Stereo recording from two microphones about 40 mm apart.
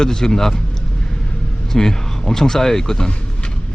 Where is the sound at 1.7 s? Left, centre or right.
Centre.